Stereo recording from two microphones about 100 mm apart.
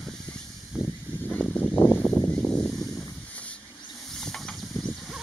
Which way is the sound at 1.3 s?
10° left (ahead or behind).